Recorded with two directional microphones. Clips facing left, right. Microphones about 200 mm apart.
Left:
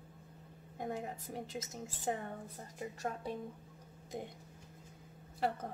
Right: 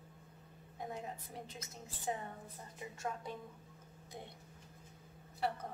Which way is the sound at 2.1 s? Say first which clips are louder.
Left 3 dB; 55° left (ahead or behind).